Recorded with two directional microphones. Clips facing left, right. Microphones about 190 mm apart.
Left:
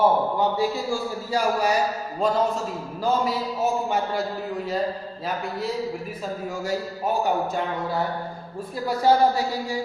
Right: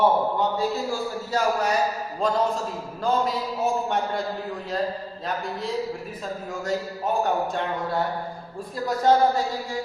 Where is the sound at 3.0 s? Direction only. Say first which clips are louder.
Even; 5° left (ahead or behind).